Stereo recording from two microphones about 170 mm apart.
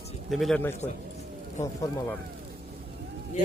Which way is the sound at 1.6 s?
15° left (ahead or behind).